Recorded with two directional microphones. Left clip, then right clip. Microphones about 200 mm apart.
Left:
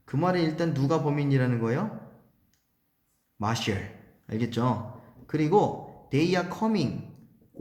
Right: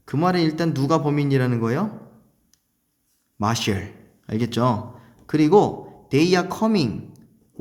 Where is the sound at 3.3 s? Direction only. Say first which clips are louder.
Right 6 dB; 35° right (ahead or behind).